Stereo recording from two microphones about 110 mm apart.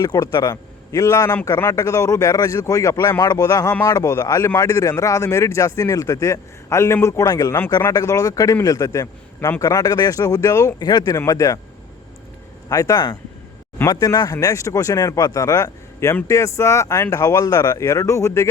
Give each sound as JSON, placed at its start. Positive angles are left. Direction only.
{"t": 0.0, "sound": "a man's voice", "side_deg": 35}
{"t": 12.6, "sound": "a man's voice", "side_deg": 30}